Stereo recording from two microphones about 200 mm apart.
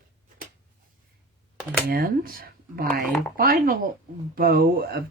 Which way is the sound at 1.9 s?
50° right (ahead or behind).